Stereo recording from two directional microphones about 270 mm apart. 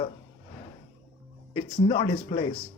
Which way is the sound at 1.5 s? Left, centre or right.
Left.